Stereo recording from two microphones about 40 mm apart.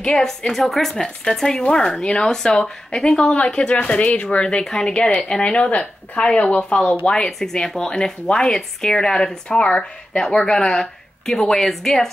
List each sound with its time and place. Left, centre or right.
0.0 s a woman's voice: left
0.5 s speech: centre; by 7.0 s left
7.2 s speech: centre